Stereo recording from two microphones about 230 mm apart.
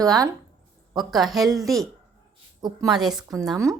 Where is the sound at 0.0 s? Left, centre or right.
Centre.